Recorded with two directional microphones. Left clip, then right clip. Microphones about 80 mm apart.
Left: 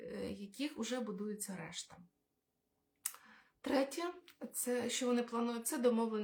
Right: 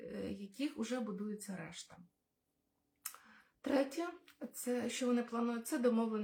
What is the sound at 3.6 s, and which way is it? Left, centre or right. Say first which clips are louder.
Speech: even; centre.